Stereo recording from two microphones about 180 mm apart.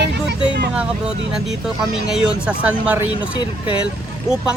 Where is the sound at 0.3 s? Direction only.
65° right (ahead or behind).